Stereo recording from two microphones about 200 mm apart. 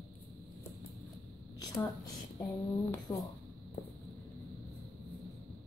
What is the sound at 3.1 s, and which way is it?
Speech, 10° left (ahead or behind).